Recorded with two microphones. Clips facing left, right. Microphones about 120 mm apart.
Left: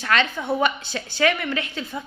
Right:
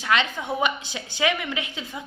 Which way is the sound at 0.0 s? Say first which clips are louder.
Left 1 dB; 15° right (ahead or behind).